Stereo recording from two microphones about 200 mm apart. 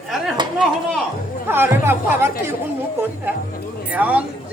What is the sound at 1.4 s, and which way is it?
Speech, 10° right (ahead or behind).